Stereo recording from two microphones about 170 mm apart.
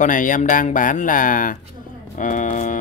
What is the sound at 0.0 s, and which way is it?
Speech, 50° left (ahead or behind).